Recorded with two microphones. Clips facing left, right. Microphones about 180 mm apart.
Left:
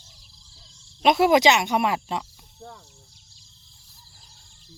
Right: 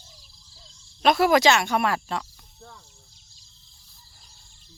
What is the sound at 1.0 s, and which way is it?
Cricket, 20° left (ahead or behind).